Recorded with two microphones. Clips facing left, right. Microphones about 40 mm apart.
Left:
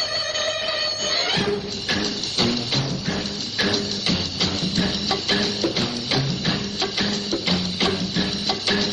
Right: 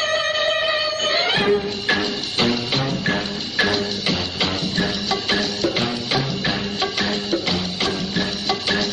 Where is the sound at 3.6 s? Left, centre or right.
Centre.